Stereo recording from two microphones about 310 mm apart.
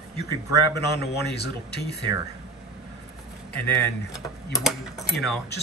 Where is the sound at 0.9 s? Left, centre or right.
Left.